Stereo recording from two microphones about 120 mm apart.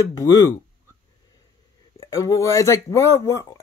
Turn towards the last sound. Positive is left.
turn(degrees=25)  # may be behind; listen again after turning